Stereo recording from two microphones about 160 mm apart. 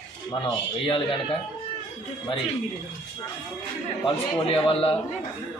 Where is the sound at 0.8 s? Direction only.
35° left (ahead or behind).